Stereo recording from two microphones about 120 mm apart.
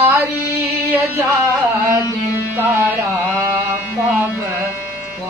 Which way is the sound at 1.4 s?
25° right (ahead or behind).